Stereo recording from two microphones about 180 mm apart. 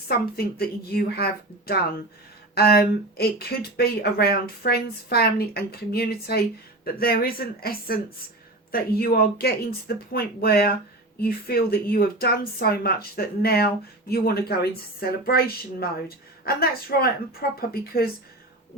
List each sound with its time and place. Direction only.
0.1 s speech: 60° left (ahead or behind)